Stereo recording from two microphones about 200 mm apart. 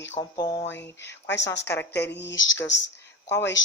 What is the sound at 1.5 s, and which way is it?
A woman's voice, 60° left (ahead or behind).